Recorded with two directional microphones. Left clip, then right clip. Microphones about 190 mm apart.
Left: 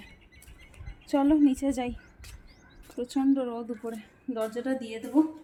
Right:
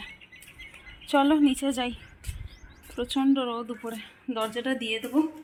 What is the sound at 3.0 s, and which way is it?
Speech, centre (ahead or behind).